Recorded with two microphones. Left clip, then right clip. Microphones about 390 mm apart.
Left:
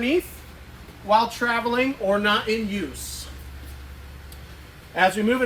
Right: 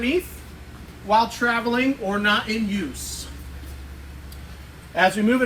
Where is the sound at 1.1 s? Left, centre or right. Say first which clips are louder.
Right 2 dB; centre.